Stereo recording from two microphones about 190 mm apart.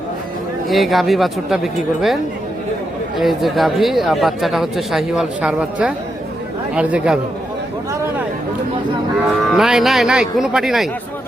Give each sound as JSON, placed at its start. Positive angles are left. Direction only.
{"t": 0.7, "sound": "speech", "side_deg": 0}
{"t": 3.2, "sound": "speech", "side_deg": 0}
{"t": 9.4, "sound": "speech", "side_deg": 0}